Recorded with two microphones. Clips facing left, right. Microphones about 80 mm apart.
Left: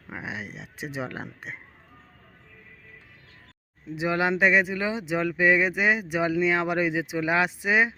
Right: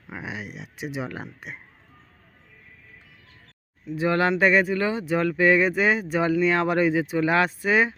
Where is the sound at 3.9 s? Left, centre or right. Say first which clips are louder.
Right 3 dB; centre.